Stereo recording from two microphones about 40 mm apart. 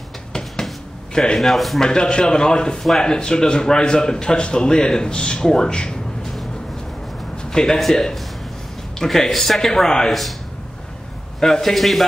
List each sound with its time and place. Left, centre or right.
0.3 s a sound: centre
1.1 s speech: centre
1.4 s a man's voice: centre
1.8 s speech: centre
7.4 s a man's voice: centre
9.0 s a man's voice: centre
11.3 s a man's voice: centre
11.7 s a man's voice: centre